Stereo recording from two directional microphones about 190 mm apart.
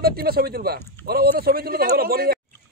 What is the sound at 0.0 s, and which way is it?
A man's voice, 55° right (ahead or behind).